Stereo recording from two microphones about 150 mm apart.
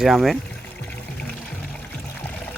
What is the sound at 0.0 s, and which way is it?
Speech, centre (ahead or behind).